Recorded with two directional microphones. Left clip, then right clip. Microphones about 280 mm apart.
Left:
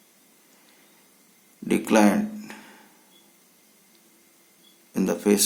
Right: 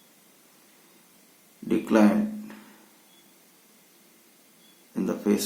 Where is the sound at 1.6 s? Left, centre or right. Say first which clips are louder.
Left 2 dB; left.